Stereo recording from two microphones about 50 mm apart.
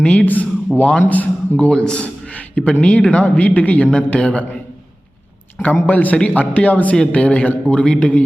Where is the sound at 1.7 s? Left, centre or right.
Centre.